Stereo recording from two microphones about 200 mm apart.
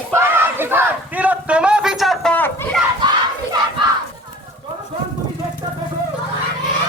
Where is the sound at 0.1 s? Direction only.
10° right (ahead or behind); by 2.6 s 10° left (ahead or behind).